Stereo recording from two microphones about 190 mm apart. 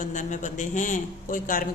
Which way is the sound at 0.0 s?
40° left (ahead or behind).